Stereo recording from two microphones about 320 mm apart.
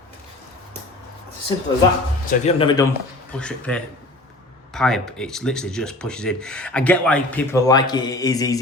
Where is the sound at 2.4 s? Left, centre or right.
Centre.